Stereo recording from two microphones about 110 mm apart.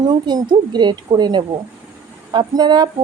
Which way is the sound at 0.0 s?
40° right (ahead or behind).